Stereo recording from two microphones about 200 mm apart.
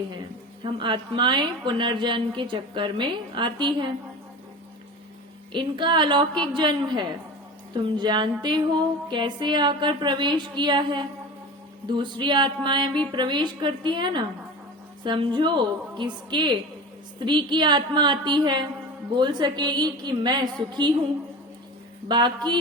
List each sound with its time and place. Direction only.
0.6 s a woman's voice: 25° right (ahead or behind)
5.5 s a woman's voice: 25° right (ahead or behind)
22.1 s a woman's voice: 20° right (ahead or behind)